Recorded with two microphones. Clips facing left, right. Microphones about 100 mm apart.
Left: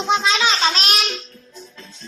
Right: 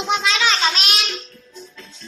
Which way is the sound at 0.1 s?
25° left (ahead or behind).